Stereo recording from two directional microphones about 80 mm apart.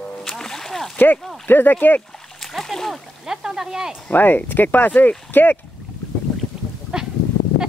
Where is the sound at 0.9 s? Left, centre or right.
Left.